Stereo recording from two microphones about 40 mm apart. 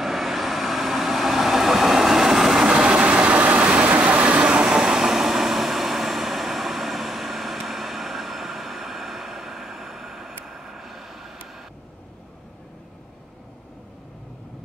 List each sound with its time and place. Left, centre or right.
0.0 s vehicle: centre
2.6 s train: right
4.5 s vehicle: right; by 11.3 s centre